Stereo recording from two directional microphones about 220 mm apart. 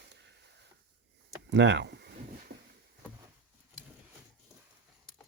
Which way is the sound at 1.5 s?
55° right (ahead or behind).